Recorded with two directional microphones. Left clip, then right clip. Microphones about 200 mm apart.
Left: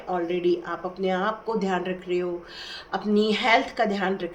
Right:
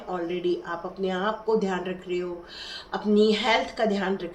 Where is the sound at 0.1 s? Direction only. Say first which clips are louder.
Left 3 dB; 35° left (ahead or behind).